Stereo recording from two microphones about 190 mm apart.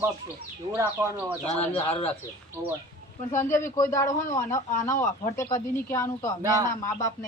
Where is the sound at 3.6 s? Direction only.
15° left (ahead or behind).